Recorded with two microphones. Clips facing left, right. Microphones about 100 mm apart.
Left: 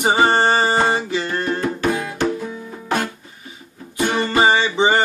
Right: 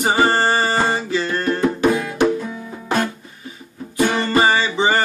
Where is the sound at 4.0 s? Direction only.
15° left (ahead or behind).